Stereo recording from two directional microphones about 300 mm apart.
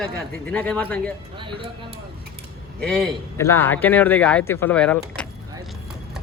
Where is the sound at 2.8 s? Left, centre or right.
Centre.